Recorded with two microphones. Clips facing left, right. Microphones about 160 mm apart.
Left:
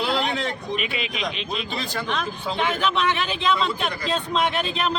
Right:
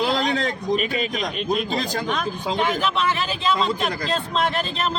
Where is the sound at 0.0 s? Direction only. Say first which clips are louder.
Right 3 dB; 40° right (ahead or behind).